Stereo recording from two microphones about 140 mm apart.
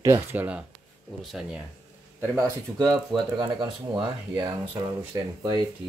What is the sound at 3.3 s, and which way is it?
Speech, 35° right (ahead or behind).